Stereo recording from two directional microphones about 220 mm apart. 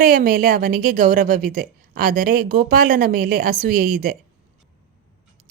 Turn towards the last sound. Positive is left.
turn(degrees=-40)  # may be behind; listen again after turning